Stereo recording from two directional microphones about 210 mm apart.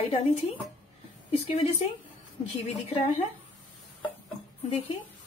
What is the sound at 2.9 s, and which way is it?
Speech, 30° left (ahead or behind).